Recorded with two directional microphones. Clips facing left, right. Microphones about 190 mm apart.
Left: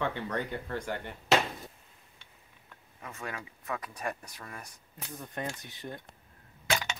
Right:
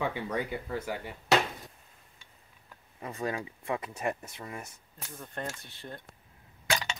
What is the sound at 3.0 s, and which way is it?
Speech, 35° right (ahead or behind).